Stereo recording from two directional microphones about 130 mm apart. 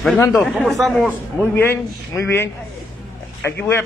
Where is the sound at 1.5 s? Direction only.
20° left (ahead or behind).